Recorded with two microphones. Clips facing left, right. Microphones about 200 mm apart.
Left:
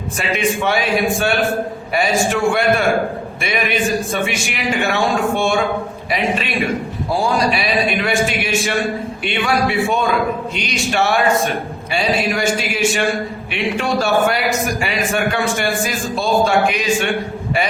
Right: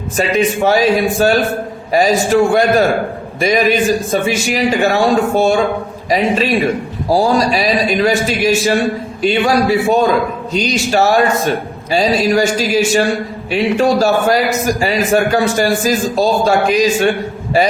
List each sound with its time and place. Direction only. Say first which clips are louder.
0.2 s a man's voice: right 6 dB; 40° right (ahead or behind)